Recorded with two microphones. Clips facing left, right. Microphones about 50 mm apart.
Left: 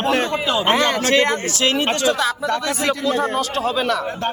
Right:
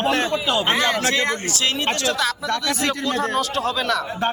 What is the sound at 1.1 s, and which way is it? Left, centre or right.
Speech, left.